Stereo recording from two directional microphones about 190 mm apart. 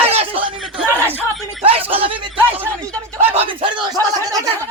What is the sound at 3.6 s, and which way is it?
Speech, 25° right (ahead or behind).